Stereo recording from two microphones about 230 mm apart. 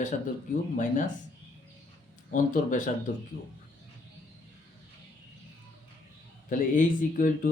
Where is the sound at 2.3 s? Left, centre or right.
Left.